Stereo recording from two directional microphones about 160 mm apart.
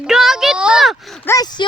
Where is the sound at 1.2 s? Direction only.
25° left (ahead or behind).